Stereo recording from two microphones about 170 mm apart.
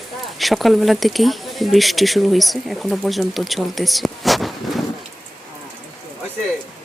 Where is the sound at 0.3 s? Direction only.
Centre (ahead or behind).